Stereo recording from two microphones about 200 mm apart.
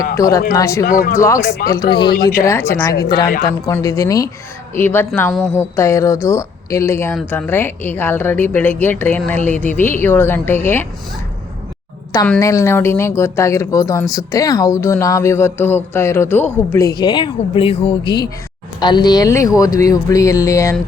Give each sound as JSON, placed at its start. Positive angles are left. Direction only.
{"t": 0.2, "sound": "speech", "side_deg": 15}
{"t": 0.9, "sound": "speech", "side_deg": 45}
{"t": 1.2, "sound": "speech", "side_deg": 15}
{"t": 2.5, "sound": "speech", "side_deg": 10}
{"t": 12.1, "sound": "speech", "side_deg": 10}